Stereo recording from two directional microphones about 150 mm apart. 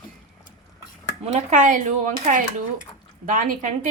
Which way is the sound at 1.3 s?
55° right (ahead or behind).